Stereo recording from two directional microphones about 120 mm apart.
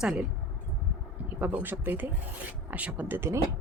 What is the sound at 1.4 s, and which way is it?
Speech, 15° right (ahead or behind).